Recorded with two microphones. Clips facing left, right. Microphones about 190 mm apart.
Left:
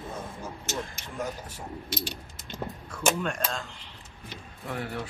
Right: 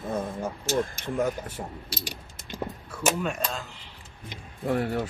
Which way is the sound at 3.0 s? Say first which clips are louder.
Right 1 dB; 5° right (ahead or behind).